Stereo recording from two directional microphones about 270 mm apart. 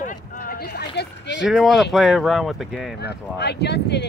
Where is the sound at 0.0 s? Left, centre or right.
Left.